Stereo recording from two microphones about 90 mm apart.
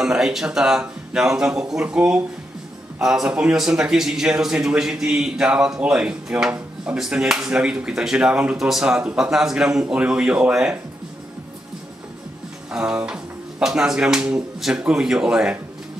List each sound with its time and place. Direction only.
0.0 s a man's voice: 5° right (ahead or behind)
12.7 s a man's voice: 10° right (ahead or behind)